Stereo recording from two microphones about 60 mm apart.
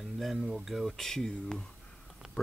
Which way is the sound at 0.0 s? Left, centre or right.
Centre.